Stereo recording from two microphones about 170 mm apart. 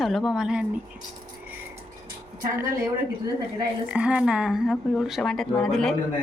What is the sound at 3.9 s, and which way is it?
Speech, 5° right (ahead or behind).